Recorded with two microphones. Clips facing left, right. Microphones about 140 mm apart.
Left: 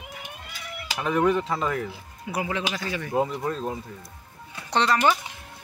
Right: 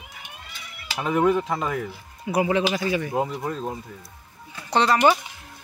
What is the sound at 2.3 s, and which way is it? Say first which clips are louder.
Speech: right 7 dB; 20° right (ahead or behind).